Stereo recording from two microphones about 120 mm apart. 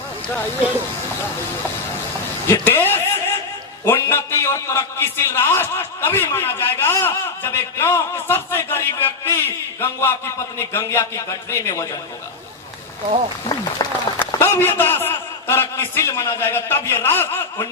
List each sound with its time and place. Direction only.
2.5 s a man's voice: 20° left (ahead or behind)
13.8 s speech: 35° left (ahead or behind)
14.2 s a man's voice: 20° left (ahead or behind)